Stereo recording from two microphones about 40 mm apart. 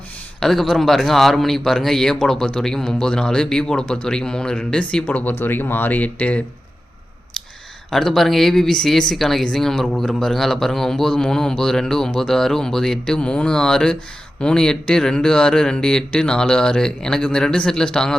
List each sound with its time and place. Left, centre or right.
0.3 s a man's voice: centre
5.0 s speech: left
5.4 s speech: left
5.9 s speech: left
7.9 s a man's voice: centre
13.1 s a man's voice: left